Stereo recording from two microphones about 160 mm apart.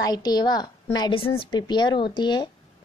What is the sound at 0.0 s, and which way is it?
A woman's voice, 25° left (ahead or behind).